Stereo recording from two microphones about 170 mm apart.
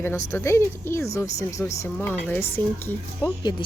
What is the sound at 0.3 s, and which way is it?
Speech, 15° left (ahead or behind).